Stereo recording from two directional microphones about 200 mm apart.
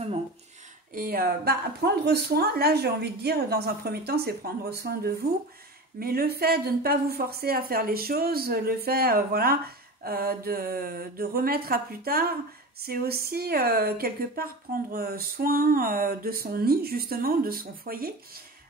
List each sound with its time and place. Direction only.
0.9 s speech: 45° right (ahead or behind)